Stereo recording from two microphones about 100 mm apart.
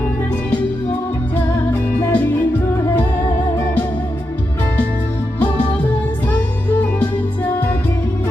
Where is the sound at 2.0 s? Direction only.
15° left (ahead or behind).